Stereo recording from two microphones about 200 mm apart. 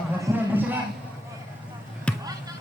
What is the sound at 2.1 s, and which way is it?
Basketball bounce, 5° left (ahead or behind).